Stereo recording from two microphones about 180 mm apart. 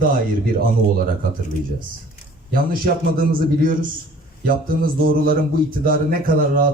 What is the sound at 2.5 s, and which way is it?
Speech, 55° right (ahead or behind).